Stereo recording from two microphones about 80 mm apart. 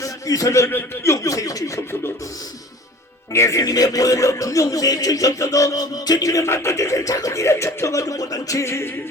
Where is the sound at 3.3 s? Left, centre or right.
Left.